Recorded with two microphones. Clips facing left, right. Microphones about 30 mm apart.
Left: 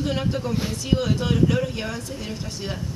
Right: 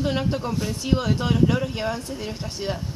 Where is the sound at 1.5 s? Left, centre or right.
Right.